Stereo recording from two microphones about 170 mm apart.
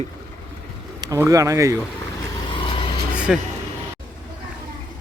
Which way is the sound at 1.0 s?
20° right (ahead or behind).